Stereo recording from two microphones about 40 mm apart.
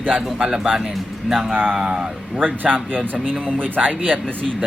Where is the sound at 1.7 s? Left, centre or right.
Centre.